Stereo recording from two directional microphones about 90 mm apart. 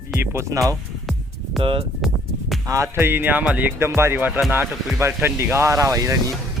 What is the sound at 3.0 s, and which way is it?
Speech, 25° right (ahead or behind).